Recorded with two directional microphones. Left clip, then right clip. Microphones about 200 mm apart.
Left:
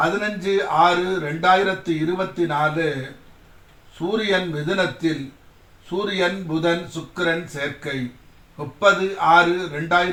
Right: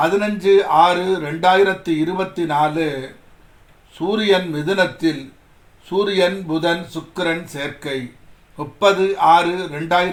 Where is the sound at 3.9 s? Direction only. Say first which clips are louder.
Right 4 dB; 50° right (ahead or behind).